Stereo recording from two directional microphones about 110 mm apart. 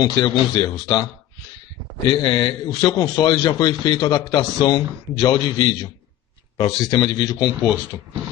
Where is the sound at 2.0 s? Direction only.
45° left (ahead or behind).